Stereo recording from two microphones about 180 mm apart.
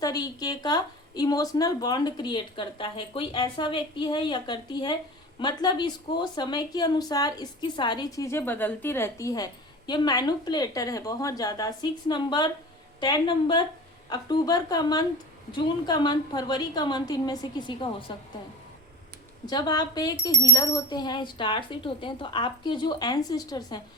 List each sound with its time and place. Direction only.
0.0 s a woman's voice: 20° left (ahead or behind)
19.5 s a woman's voice: 25° left (ahead or behind)